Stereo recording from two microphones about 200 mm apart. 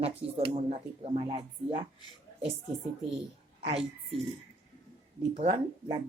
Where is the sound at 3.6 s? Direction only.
30° right (ahead or behind).